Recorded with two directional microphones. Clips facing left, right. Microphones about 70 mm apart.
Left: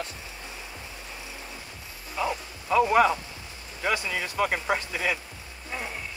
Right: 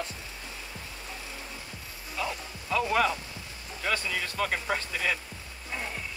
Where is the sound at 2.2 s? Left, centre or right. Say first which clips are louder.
Left 5 dB; centre.